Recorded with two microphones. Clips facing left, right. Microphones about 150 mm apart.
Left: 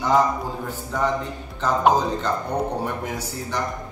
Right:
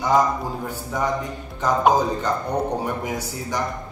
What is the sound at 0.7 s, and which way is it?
A man's voice, 10° right (ahead or behind).